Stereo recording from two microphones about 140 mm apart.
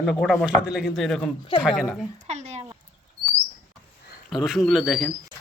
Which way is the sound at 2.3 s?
55° right (ahead or behind).